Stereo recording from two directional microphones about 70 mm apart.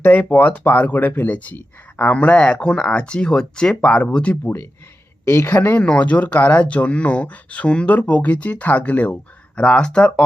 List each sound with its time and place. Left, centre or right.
0.0 s speech: left
5.3 s speech: left
5.7 s speech: centre